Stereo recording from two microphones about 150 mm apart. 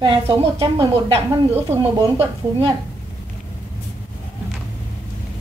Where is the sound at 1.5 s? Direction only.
15° right (ahead or behind).